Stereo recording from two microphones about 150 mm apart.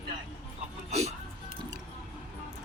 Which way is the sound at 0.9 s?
45° right (ahead or behind).